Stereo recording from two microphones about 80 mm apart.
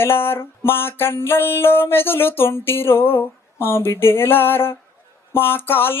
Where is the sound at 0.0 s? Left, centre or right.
Left.